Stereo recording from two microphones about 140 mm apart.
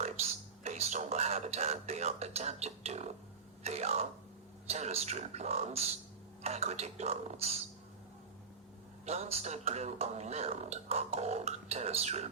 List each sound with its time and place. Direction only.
0.0 s speech: 55° right (ahead or behind)
9.0 s speech: 50° right (ahead or behind)